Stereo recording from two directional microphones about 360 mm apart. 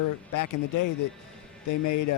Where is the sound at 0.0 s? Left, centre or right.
Left.